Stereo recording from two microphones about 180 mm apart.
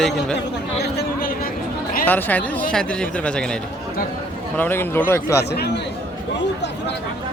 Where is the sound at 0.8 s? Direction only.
60° left (ahead or behind).